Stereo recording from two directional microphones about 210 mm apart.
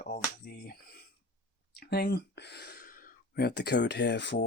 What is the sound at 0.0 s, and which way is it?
Speech, 45° left (ahead or behind).